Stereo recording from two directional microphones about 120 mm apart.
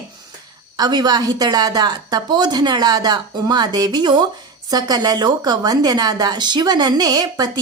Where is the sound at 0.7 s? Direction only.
35° right (ahead or behind).